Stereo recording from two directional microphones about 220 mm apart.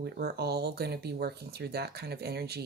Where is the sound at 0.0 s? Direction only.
50° right (ahead or behind).